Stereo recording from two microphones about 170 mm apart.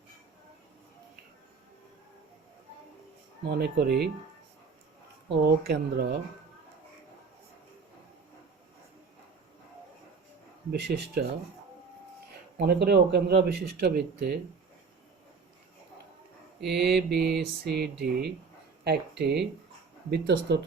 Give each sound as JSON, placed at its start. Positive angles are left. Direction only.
{"t": 3.5, "sound": "speech", "side_deg": -70}
{"t": 5.3, "sound": "speech", "side_deg": -80}
{"t": 10.7, "sound": "speech", "side_deg": -80}
{"t": 12.5, "sound": "speech", "side_deg": -75}
{"t": 16.6, "sound": "speech", "side_deg": -80}